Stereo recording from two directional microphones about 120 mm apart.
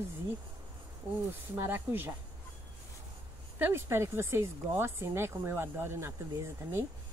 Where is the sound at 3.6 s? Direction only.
20° right (ahead or behind).